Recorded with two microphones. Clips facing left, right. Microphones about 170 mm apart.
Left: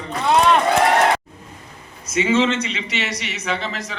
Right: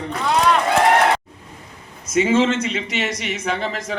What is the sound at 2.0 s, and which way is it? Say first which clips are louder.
A man's voice: right 1 dB; 45° right (ahead or behind).